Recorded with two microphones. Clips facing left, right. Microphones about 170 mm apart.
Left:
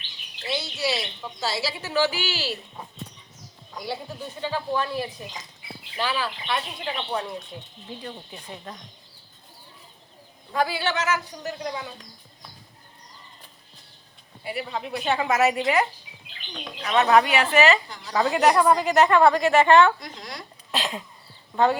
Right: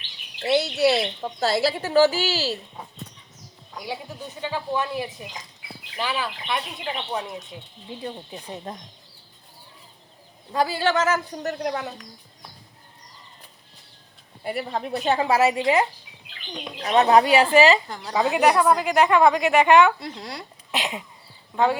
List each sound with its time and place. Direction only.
0.4 s speech: 60° right (ahead or behind)
1.9 s a woman's voice: 40° right (ahead or behind)
4.4 s a woman's voice: 15° right (ahead or behind)
10.5 s a woman's voice: 40° right (ahead or behind); by 11.9 s 60° right (ahead or behind)
14.4 s a woman's voice: 45° right (ahead or behind); by 17.7 s 30° right (ahead or behind)
17.8 s a woman's voice: 50° right (ahead or behind)
18.1 s a woman's voice: 15° right (ahead or behind)
18.5 s a woman's voice: centre (ahead or behind)
20.0 s a woman's voice: 30° right (ahead or behind)
20.7 s a sound: 15° right (ahead or behind)
21.5 s speech: 10° right (ahead or behind)